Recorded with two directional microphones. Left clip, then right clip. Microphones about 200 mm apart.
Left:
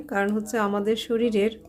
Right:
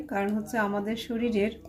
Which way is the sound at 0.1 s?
35° left (ahead or behind).